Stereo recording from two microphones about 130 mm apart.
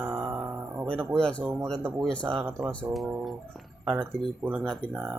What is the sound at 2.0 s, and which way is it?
Speech, 10° left (ahead or behind).